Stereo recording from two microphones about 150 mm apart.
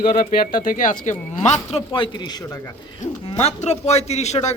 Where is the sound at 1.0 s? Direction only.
50° left (ahead or behind).